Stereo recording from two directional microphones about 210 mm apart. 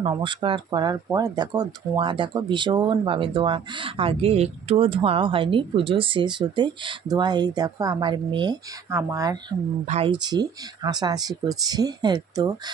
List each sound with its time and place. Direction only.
0.0 s speech: 25° right (ahead or behind)
9.8 s speech: 30° right (ahead or behind)
10.8 s speech: 20° right (ahead or behind)